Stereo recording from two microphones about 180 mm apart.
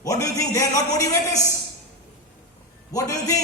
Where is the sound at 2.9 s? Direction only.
20° left (ahead or behind).